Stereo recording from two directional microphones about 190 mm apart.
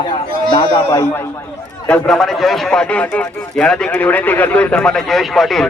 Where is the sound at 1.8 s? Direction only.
5° left (ahead or behind).